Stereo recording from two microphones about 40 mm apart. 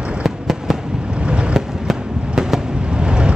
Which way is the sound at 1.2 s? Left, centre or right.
Right.